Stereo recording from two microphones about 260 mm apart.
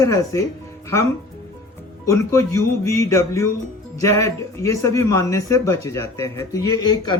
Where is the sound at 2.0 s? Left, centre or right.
Centre.